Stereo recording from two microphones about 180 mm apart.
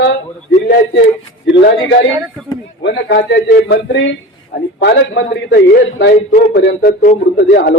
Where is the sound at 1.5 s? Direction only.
75° left (ahead or behind).